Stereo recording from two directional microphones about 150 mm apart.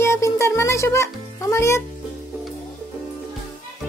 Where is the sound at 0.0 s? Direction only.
20° left (ahead or behind).